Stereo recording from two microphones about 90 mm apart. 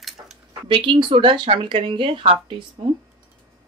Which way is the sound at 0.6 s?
65° right (ahead or behind).